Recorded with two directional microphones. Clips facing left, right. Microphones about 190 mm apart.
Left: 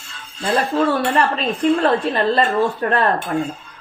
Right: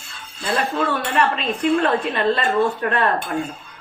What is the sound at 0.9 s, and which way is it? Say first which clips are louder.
A woman's voice: left 3 dB; 35° left (ahead or behind).